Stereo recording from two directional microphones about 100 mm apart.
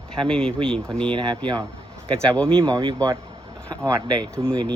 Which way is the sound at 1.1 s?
50° right (ahead or behind).